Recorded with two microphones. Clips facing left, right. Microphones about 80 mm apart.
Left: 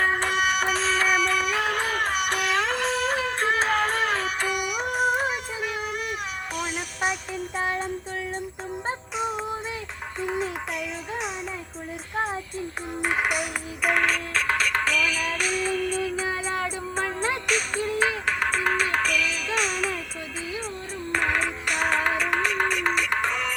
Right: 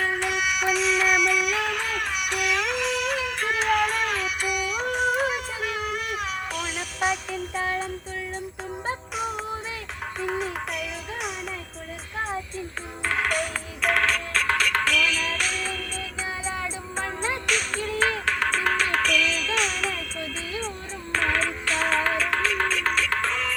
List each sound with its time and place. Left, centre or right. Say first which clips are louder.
0.0 s music: left 2 dB; left
4.8 s a sound: even; centre
7.6 s child singing: left 1 dB; left
9.1 s music: left 4 dB; centre
13.0 s music: even; centre
16.5 s music: left 3 dB; left
17.4 s music: left 1 dB; centre
21.1 s music: even; centre